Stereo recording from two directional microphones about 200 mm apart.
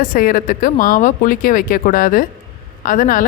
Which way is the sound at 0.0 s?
45° left (ahead or behind).